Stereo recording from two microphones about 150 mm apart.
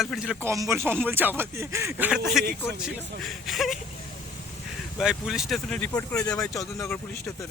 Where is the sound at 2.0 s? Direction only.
Centre (ahead or behind).